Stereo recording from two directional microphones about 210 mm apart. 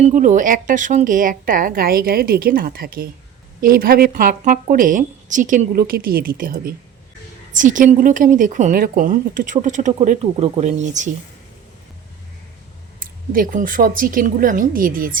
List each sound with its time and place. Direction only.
0.0 s a woman's voice: 35° right (ahead or behind)
13.3 s a woman's voice: 40° right (ahead or behind)